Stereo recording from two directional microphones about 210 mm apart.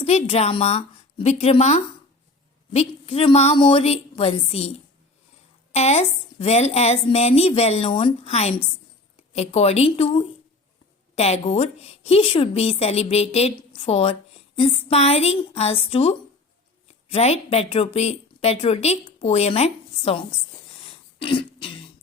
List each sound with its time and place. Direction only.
0.0 s a woman's voice: 30° left (ahead or behind)
5.7 s a woman's voice: 30° left (ahead or behind)
20.8 s throat clearing: 25° left (ahead or behind)